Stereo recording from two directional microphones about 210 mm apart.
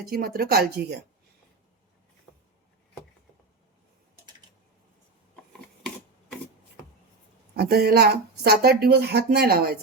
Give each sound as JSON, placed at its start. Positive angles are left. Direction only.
{"t": 0.1, "sound": "speech", "side_deg": -45}
{"t": 2.3, "sound": "a sound", "side_deg": 5}
{"t": 7.5, "sound": "speech", "side_deg": -50}